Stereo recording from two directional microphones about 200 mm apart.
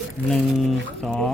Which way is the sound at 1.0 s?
5° left (ahead or behind).